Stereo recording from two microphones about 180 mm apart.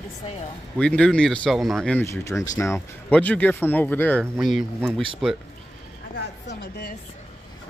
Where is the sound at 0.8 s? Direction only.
5° left (ahead or behind).